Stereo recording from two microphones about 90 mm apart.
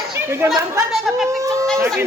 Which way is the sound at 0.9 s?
5° right (ahead or behind).